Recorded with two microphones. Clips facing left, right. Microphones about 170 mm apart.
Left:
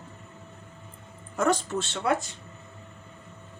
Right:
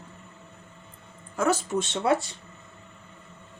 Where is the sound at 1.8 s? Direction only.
25° right (ahead or behind).